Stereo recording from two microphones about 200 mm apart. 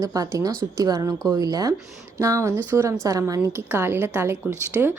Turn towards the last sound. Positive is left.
turn(degrees=-10)  # may be behind; listen again after turning